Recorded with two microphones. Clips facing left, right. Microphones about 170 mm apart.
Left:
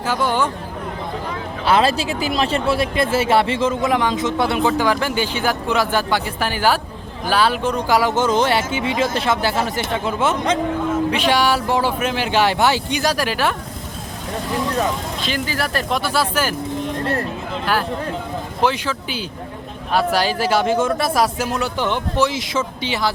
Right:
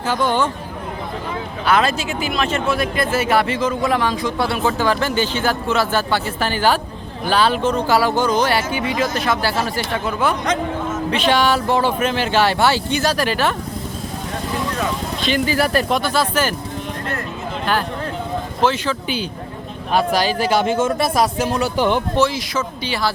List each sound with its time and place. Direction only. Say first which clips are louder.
0.1 s speech: right 1 dB; 10° left (ahead or behind)
1.6 s speech: left 1 dB; 30° left (ahead or behind)
11.1 s speech: right 5 dB; 10° left (ahead or behind)
15.2 s speech: right 7 dB; centre (ahead or behind)
18.6 s speech: right 1 dB; 10° left (ahead or behind)
19.9 s speech: right 1 dB; 20° right (ahead or behind)
21.0 s speech: right 1 dB; 5° left (ahead or behind)
21.6 s speech: right 6 dB; 10° right (ahead or behind)
22.2 s speech: right 1 dB; 20° left (ahead or behind)